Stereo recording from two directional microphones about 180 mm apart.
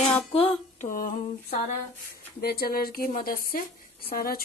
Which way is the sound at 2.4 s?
55° left (ahead or behind).